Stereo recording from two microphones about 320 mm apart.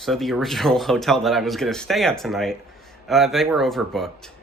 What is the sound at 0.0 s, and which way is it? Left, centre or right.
Speech, centre.